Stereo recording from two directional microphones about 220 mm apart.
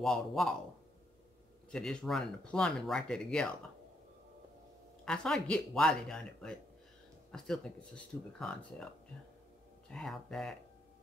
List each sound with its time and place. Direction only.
0.0 s speech: centre (ahead or behind)
1.7 s speech: 5° left (ahead or behind)
5.0 s speech: 5° left (ahead or behind)
9.8 s speech: centre (ahead or behind)